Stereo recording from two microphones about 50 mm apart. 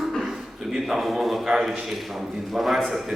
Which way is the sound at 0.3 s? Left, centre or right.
Centre.